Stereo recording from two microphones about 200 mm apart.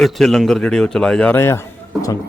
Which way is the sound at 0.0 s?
Centre (ahead or behind).